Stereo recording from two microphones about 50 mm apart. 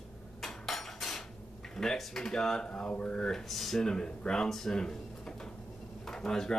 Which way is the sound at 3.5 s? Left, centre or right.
Centre.